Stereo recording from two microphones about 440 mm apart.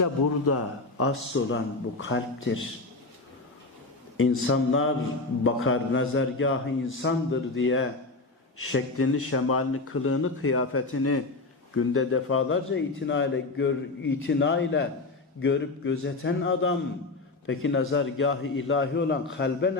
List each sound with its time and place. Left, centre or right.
0.0 s a man's voice: left
4.2 s a man's voice: left